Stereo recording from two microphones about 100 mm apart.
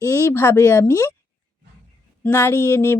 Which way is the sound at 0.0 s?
30° left (ahead or behind).